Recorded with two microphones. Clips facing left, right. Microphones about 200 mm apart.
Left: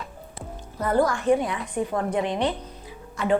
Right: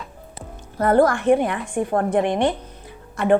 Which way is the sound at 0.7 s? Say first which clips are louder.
Right 6 dB; 60° right (ahead or behind).